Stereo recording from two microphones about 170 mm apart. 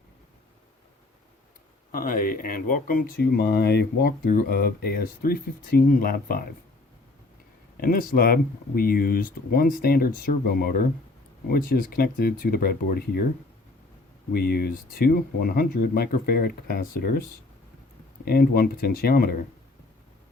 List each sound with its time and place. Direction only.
1.9 s speech: 55° left (ahead or behind)
7.8 s speech: 55° left (ahead or behind)
14.3 s speech: 65° left (ahead or behind)
18.3 s speech: 65° left (ahead or behind)